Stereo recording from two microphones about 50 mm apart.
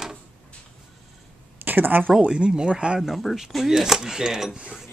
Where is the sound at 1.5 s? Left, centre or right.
Right.